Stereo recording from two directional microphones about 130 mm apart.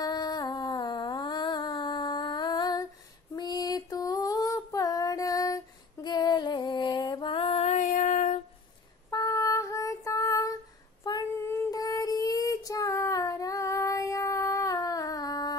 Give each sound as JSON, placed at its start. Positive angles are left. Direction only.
{"t": 0.0, "sound": "a sound", "side_deg": 30}
{"t": 3.3, "sound": "female singing", "side_deg": 30}
{"t": 6.0, "sound": "music", "side_deg": 35}
{"t": 7.6, "sound": "a sound", "side_deg": 70}
{"t": 9.1, "sound": "female singing", "side_deg": 25}
{"t": 11.7, "sound": "child singing", "side_deg": 30}